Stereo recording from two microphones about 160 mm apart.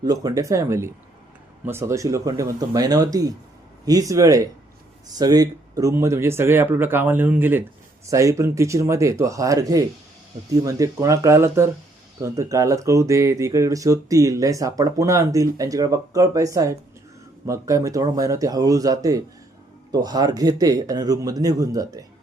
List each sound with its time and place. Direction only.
0.0 s speech: 25° right (ahead or behind)